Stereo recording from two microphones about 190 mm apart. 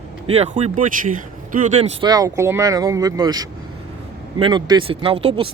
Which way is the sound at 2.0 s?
20° right (ahead or behind).